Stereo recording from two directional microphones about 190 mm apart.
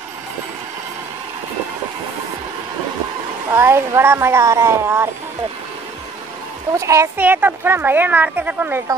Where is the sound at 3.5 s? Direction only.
15° right (ahead or behind).